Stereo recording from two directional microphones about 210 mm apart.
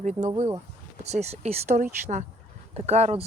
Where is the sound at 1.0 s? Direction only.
30° right (ahead or behind).